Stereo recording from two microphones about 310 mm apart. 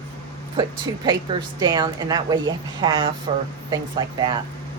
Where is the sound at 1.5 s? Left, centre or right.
Centre.